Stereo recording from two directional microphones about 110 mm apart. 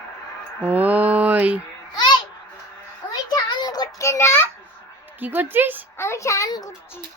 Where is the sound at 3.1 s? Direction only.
40° left (ahead or behind); by 4.4 s 25° left (ahead or behind).